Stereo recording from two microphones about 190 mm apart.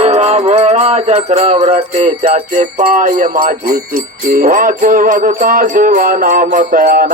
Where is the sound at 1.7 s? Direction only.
35° right (ahead or behind).